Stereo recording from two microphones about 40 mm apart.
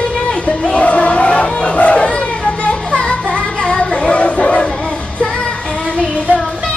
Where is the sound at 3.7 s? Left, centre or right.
Left.